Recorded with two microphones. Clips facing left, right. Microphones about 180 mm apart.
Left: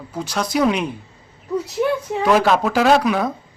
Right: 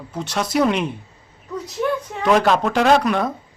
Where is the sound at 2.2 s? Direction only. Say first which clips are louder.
Even; centre (ahead or behind).